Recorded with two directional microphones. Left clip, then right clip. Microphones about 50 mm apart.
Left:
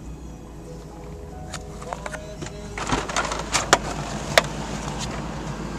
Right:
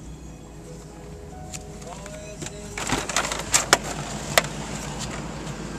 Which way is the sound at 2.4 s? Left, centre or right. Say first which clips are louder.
Right 1 dB; centre.